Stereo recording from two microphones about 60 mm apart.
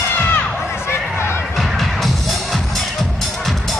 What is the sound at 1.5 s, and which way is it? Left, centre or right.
Music, centre.